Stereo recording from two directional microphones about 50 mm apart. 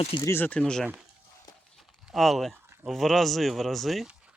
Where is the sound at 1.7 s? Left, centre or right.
Centre.